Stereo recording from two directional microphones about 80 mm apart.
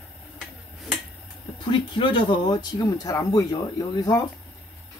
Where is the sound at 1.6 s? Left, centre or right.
Left.